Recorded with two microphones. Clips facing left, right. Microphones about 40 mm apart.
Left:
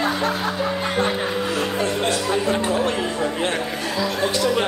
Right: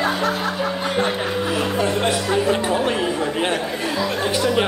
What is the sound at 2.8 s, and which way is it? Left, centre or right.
Speech, centre.